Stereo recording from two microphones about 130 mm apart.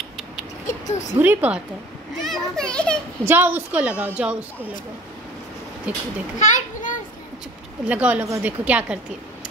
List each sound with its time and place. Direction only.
0.7 s a sound: 65° left (ahead or behind)
1.1 s a woman's voice: 15° right (ahead or behind)
2.2 s a child's voice: 5° left (ahead or behind)
3.3 s a woman's voice: 15° right (ahead or behind)
5.9 s a woman's voice: 10° right (ahead or behind)
6.4 s children playing: 75° left (ahead or behind)
7.8 s a woman's voice: 10° right (ahead or behind)